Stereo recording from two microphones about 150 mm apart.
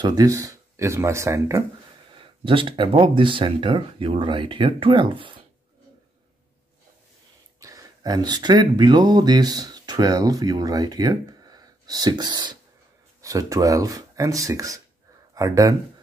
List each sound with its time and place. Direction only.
0.0 s speech: 25° right (ahead or behind)
2.1 s speech: 35° right (ahead or behind)
7.6 s speech: 25° right (ahead or behind)